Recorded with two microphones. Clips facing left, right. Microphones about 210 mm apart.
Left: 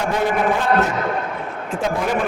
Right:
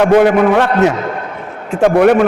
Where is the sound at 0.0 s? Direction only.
75° right (ahead or behind).